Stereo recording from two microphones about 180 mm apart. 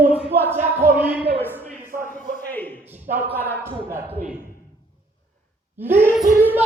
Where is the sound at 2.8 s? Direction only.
10° right (ahead or behind).